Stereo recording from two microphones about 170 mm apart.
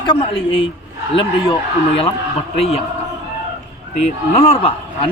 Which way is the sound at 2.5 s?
35° left (ahead or behind).